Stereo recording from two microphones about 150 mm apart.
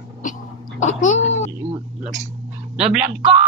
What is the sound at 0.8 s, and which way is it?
Speech, 55° left (ahead or behind).